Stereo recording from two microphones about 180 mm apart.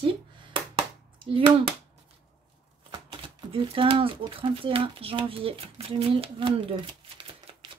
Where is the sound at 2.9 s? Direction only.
25° right (ahead or behind).